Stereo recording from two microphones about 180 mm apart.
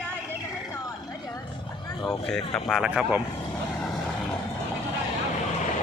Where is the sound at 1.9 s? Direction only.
15° left (ahead or behind).